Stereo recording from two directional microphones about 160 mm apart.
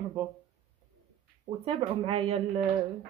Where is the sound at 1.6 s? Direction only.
35° right (ahead or behind).